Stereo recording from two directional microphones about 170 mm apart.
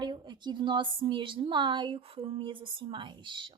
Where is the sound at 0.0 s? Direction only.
25° right (ahead or behind).